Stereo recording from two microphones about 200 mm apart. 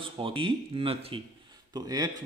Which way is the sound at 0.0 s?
25° right (ahead or behind).